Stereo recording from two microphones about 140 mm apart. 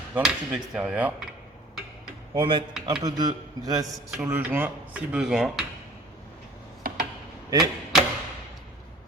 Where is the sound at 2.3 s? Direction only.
35° right (ahead or behind).